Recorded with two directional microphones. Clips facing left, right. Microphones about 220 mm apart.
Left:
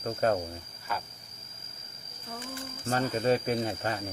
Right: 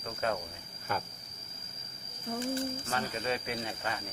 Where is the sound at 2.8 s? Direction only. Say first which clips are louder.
Left 7 dB; 40° left (ahead or behind).